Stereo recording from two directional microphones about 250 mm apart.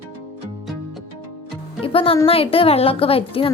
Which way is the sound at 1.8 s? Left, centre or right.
Left.